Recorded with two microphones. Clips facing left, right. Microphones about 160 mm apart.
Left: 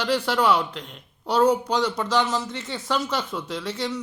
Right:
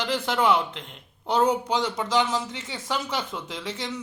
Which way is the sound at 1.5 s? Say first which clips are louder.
Left 3 dB; 10° right (ahead or behind).